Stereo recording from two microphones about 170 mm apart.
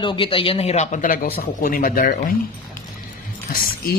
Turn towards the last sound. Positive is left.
turn(degrees=55)  # may be behind; listen again after turning